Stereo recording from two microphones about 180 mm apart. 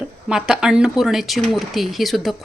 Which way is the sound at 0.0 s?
5° right (ahead or behind).